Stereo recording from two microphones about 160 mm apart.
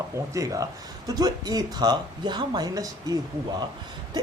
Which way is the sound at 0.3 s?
20° right (ahead or behind).